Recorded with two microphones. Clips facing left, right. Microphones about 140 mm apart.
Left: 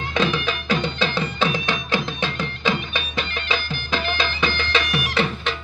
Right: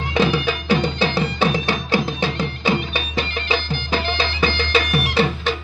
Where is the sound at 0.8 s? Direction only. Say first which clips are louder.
Right 3 dB; 35° right (ahead or behind).